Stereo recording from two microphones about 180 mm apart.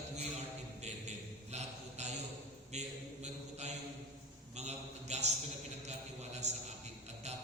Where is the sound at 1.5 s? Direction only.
40° right (ahead or behind).